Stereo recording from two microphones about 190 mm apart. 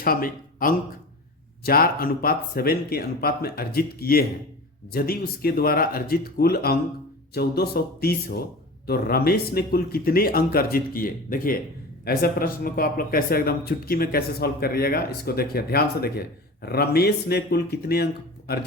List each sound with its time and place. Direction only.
0.0 s speech: 50° left (ahead or behind)